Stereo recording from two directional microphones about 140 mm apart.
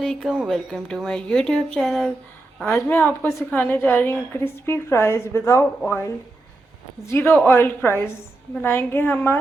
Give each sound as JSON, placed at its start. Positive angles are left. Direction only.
{"t": 0.0, "sound": "speech", "side_deg": 5}
{"t": 0.3, "sound": "speech", "side_deg": -5}
{"t": 2.6, "sound": "a woman's voice", "side_deg": 15}